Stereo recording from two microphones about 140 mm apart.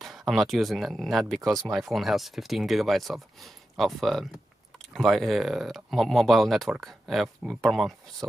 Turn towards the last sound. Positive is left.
turn(degrees=0)  # may be behind; listen again after turning